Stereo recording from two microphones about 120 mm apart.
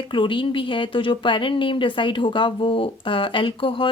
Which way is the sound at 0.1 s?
45° left (ahead or behind).